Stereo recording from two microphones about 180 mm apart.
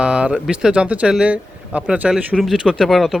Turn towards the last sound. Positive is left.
turn(degrees=0)  # may be behind; listen again after turning